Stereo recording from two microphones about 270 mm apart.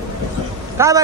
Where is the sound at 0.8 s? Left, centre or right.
Centre.